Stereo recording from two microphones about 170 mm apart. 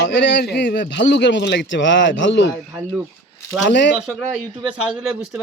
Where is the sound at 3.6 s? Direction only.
90° left.